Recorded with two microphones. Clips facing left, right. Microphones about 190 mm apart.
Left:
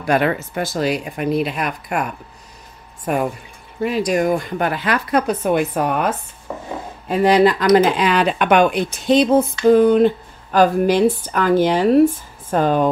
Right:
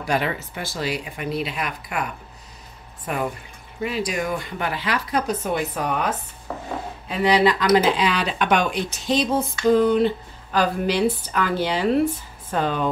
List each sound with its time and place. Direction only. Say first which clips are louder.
0.0 s speech: left 6 dB; 55° left (ahead or behind)
3.1 s speech: left 6 dB; 45° left (ahead or behind)